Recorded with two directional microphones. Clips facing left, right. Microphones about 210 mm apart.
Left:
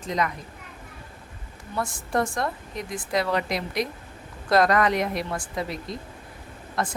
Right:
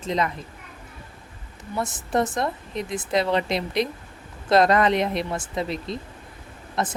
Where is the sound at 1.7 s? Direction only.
20° right (ahead or behind).